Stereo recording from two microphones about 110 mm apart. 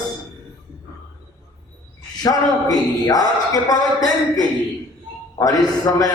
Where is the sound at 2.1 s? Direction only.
35° left (ahead or behind).